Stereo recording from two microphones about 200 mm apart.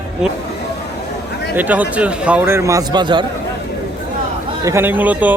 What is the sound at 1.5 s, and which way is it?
A man's voice, 10° right (ahead or behind).